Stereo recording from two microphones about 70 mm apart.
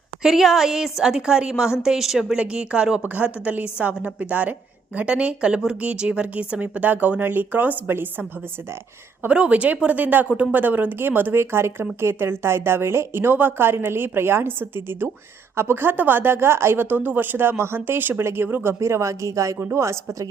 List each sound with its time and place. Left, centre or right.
0.2 s a woman's voice: centre; by 8.3 s right
9.2 s speech: centre; by 19.5 s right
19.5 s speech: right
19.8 s speech: right